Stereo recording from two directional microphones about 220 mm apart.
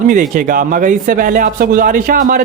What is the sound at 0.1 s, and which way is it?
Speech, 35° right (ahead or behind).